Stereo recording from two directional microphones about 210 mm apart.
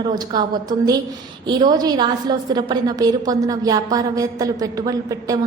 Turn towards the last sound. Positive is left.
turn(degrees=-15)  # may be behind; listen again after turning